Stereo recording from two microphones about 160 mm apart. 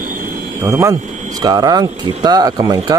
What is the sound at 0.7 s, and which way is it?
Speech, 15° right (ahead or behind).